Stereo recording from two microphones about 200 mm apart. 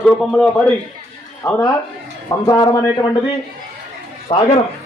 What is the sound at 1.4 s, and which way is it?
Speech, 15° left (ahead or behind).